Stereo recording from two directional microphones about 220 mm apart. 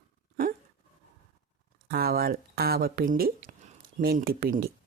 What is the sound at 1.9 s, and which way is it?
Speech, 45° right (ahead or behind).